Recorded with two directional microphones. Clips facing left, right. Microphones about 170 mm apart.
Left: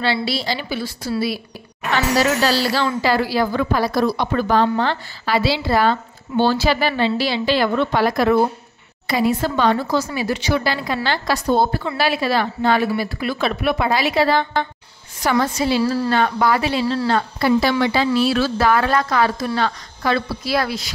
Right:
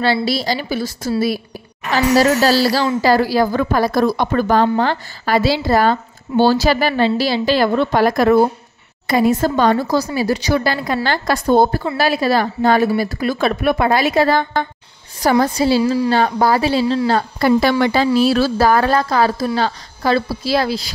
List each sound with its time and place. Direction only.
0.0 s a woman's voice: 45° right (ahead or behind)
15.1 s a woman's voice: 35° right (ahead or behind)
15.8 s a woman's voice: 15° right (ahead or behind)
16.1 s a woman's voice: 35° right (ahead or behind)
16.8 s speech: 20° right (ahead or behind)
17.1 s a woman's voice: 45° right (ahead or behind); by 20.9 s 30° right (ahead or behind)